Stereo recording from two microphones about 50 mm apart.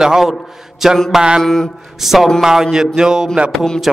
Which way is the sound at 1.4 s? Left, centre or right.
Centre.